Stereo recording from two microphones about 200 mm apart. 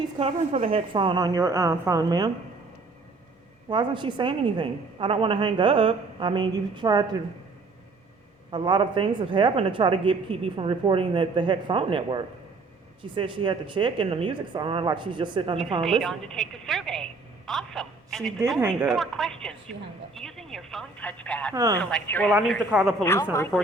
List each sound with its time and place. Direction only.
0.2 s a woman's voice: 30° right (ahead or behind)
3.7 s a woman's voice: 25° right (ahead or behind)
8.4 s a woman's voice: 25° right (ahead or behind)
15.8 s a woman's voice: centre (ahead or behind)
21.5 s a woman's voice: 20° right (ahead or behind)
21.8 s a woman's voice: 5° left (ahead or behind)